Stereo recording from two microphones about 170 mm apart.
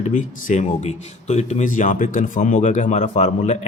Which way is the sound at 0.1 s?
45° left (ahead or behind).